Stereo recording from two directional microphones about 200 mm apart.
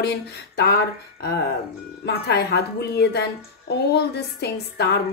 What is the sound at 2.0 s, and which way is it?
A woman's voice, 55° left (ahead or behind).